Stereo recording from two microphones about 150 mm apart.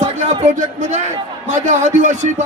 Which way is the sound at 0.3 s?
55° right (ahead or behind).